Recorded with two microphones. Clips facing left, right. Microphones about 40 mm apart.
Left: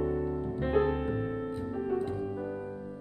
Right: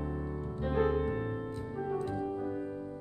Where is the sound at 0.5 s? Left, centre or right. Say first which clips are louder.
Left 1 dB; left.